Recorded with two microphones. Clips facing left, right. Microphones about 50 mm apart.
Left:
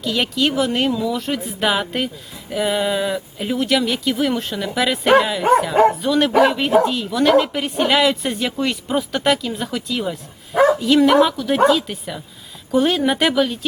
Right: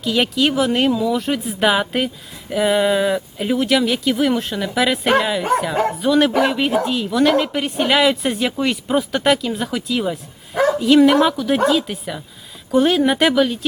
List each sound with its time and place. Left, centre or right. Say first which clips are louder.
0.0 s speech: right 2 dB; centre
5.7 s speech: left 5 dB; centre
6.0 s speech: even; centre
10.5 s bow-wow: left 3 dB; centre
10.8 s speech: right 1 dB; centre